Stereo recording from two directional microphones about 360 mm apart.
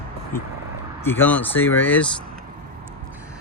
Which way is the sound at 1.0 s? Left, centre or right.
Centre.